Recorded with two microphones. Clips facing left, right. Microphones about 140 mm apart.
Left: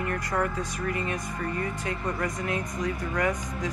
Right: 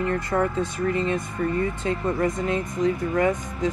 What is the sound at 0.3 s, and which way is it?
Speech, 25° right (ahead or behind).